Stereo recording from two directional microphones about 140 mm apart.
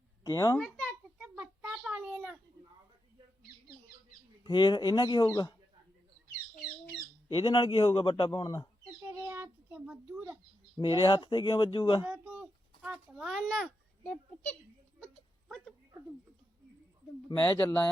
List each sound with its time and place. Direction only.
0.3 s speech: 25° left (ahead or behind)
0.6 s a child's voice: 5° left (ahead or behind)
1.2 s a sound: 10° right (ahead or behind)
4.4 s a man's voice: 30° left (ahead or behind)
7.3 s a man's voice: 40° left (ahead or behind)
9.0 s bird: 20° right (ahead or behind)
10.8 s a man's voice: 30° left (ahead or behind)
12.0 s a child's voice: 10° right (ahead or behind); by 14.5 s 10° left (ahead or behind)
14.9 s a sound: 5° left (ahead or behind)
17.2 s speech: 30° left (ahead or behind)